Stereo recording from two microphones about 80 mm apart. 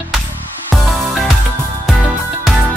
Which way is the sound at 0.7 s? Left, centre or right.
Centre.